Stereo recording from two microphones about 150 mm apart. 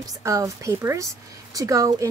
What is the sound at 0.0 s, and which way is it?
Speech, 20° right (ahead or behind).